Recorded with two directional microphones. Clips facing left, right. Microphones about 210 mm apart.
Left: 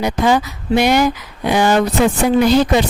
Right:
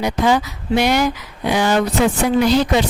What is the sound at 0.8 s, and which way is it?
A woman's voice, 50° left (ahead or behind).